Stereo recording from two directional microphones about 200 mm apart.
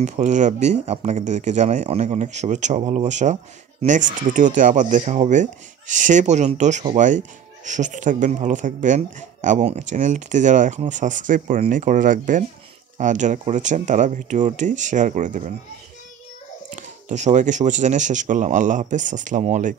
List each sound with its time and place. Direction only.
0.0 s speech: 35° right (ahead or behind)
16.7 s speech: 35° right (ahead or behind)